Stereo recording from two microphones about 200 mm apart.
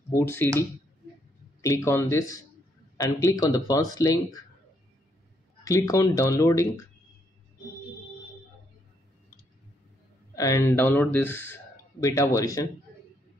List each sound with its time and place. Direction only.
0.1 s speech: 10° left (ahead or behind)
1.6 s speech: 15° left (ahead or behind)
5.6 s speech: 15° left (ahead or behind)
10.3 s speech: 15° left (ahead or behind)